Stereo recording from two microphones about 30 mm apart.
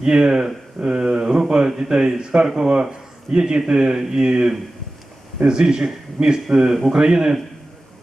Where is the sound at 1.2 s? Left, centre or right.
Right.